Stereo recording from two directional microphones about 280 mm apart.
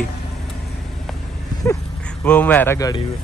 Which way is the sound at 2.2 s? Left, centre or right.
Centre.